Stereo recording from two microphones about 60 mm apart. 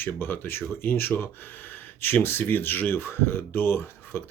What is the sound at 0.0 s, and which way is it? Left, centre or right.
Speech, left.